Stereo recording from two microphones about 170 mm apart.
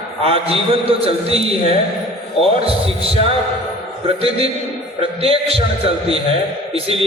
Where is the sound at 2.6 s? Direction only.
35° right (ahead or behind).